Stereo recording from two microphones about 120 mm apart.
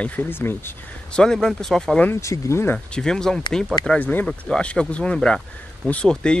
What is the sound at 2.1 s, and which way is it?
Speech, 25° left (ahead or behind).